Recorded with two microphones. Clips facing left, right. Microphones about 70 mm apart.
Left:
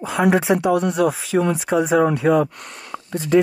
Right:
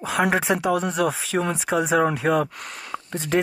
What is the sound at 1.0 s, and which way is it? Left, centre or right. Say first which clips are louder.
Speech: left 4 dB; right.